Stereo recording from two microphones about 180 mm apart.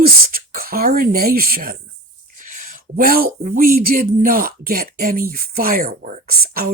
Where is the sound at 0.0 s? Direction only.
55° right (ahead or behind).